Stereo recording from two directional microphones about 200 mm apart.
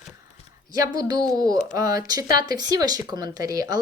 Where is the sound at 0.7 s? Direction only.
20° right (ahead or behind).